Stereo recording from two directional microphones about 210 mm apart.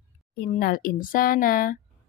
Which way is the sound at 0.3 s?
45° left (ahead or behind).